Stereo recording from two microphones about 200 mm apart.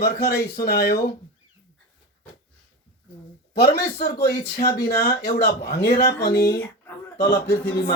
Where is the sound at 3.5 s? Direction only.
55° left (ahead or behind).